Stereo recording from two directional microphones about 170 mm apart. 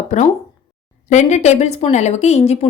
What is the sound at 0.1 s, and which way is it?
A woman's voice, 45° left (ahead or behind).